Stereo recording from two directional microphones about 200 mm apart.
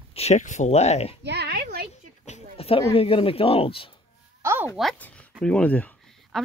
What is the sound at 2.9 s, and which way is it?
Speech, 30° left (ahead or behind).